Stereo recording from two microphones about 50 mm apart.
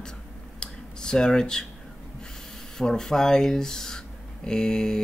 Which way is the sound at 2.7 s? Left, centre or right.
Centre.